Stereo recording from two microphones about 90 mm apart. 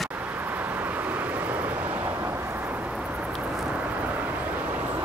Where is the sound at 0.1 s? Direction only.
20° right (ahead or behind).